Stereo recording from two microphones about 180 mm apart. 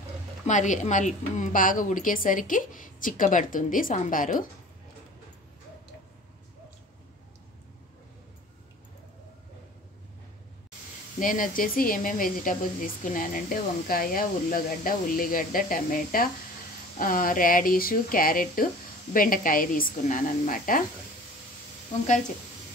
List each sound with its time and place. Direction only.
0.5 s speech: 45° left (ahead or behind)
11.1 s speech: 50° left (ahead or behind)